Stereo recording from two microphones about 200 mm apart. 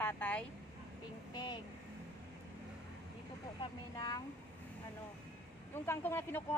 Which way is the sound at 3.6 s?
20° left (ahead or behind).